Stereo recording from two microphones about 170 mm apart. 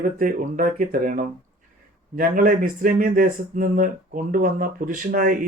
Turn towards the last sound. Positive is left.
turn(degrees=-50)  # may be behind; listen again after turning